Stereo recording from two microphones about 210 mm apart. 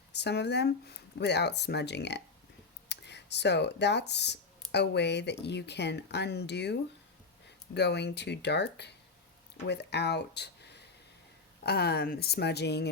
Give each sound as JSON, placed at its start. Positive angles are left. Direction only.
{"t": 0.1, "sound": "speech", "side_deg": 55}